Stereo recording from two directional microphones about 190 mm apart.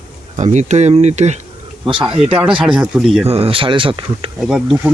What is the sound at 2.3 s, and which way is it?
Speech, 5° right (ahead or behind).